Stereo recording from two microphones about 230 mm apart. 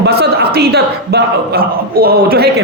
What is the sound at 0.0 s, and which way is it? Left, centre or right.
A man's voice, right.